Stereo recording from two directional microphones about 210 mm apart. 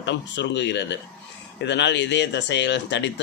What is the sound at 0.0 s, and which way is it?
Speech, 55° left (ahead or behind).